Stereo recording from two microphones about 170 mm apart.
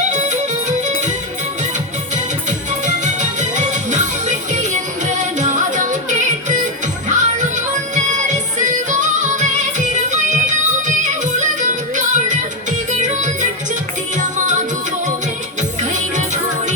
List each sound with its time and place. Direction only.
0.1 s music: 45° right (ahead or behind)
2.1 s music: 45° right (ahead or behind)
15.8 s music: 45° right (ahead or behind)